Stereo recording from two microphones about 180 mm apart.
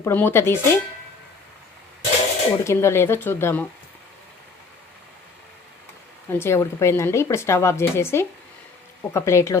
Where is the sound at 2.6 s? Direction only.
15° left (ahead or behind).